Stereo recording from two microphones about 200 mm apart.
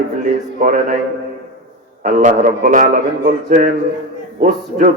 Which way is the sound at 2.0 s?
40° right (ahead or behind).